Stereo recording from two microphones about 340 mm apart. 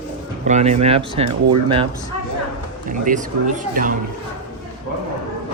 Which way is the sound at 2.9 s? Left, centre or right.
Right.